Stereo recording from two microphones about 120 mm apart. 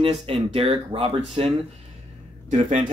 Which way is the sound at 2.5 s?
90° right.